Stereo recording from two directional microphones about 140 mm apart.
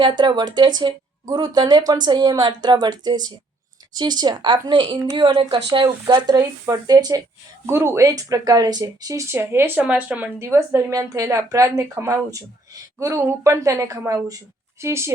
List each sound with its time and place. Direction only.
0.0 s speech: 30° right (ahead or behind)